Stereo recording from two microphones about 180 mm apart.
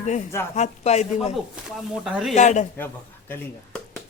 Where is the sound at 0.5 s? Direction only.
40° left (ahead or behind).